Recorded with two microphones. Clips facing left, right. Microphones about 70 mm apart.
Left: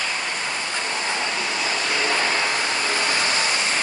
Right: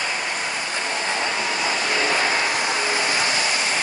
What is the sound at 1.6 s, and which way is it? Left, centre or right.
Vehicle, centre.